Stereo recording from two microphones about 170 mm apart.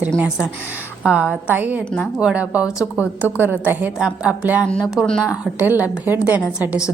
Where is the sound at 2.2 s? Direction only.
5° right (ahead or behind).